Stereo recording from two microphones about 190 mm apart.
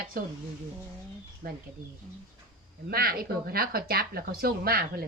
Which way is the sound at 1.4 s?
50° right (ahead or behind).